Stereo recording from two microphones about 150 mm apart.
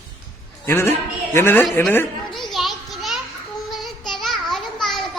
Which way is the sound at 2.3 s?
Centre (ahead or behind).